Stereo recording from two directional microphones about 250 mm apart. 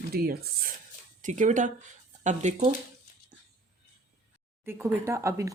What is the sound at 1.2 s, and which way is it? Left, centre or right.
Speech, right.